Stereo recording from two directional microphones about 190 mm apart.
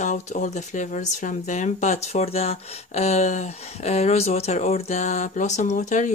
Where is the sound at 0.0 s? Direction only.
40° left (ahead or behind).